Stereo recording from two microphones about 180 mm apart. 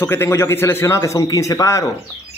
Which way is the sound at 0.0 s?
15° left (ahead or behind).